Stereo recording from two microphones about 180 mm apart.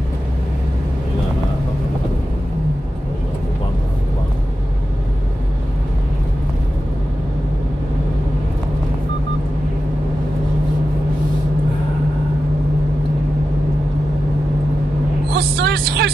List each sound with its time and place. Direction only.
15.3 s vehicle: 65° right (ahead or behind)